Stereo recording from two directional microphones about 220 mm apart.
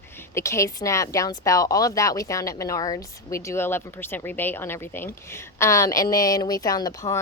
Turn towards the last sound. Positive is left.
turn(degrees=15)  # may be behind; listen again after turning